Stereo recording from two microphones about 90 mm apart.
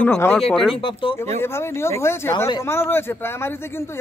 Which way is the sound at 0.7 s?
80° left.